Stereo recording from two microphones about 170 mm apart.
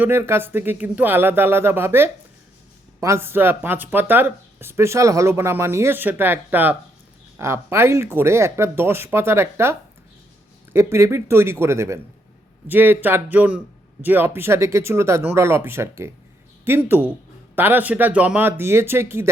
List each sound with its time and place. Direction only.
0.0 s speech: 15° right (ahead or behind)